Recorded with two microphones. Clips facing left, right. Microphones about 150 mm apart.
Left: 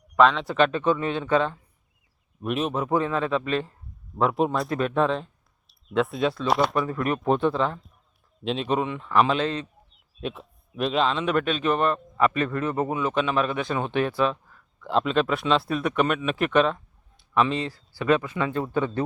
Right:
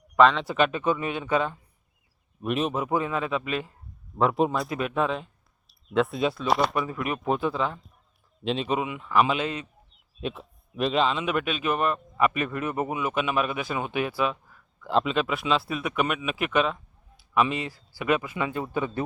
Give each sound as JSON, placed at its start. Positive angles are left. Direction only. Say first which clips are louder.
{"t": 0.2, "sound": "a man's voice", "louder": "left 1 dB", "side_deg": 0}
{"t": 2.4, "sound": "a man's voice", "louder": "even", "side_deg": 0}
{"t": 9.9, "sound": "a man's voice", "louder": "even", "side_deg": 0}